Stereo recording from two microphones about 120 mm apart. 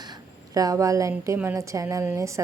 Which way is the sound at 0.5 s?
30° right (ahead or behind).